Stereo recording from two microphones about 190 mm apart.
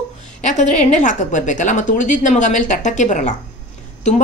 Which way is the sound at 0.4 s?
40° left (ahead or behind).